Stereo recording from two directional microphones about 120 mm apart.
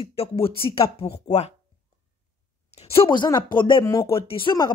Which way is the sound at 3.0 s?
40° left (ahead or behind).